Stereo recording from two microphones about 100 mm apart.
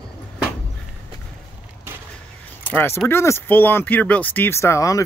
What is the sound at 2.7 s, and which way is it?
Speech, 25° left (ahead or behind).